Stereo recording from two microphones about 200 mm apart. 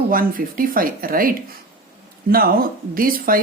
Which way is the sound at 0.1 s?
45° right (ahead or behind).